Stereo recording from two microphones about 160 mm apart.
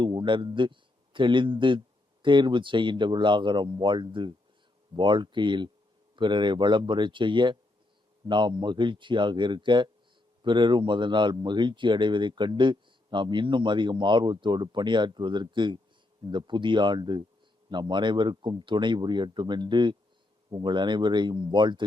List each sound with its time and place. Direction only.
0.0 s a man's voice: 30° right (ahead or behind)